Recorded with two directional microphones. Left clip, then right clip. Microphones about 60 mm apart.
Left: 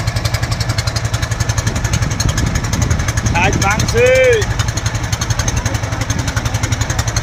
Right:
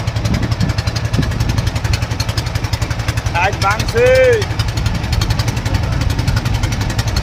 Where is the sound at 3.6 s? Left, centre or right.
Left.